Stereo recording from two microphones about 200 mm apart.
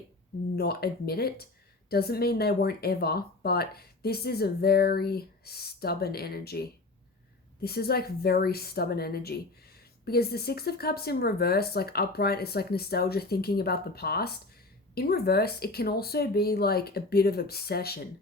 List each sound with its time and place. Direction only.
0.5 s speech: 50° left (ahead or behind)